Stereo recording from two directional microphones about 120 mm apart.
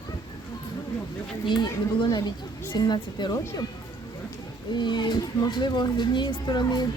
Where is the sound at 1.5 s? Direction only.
40° left (ahead or behind).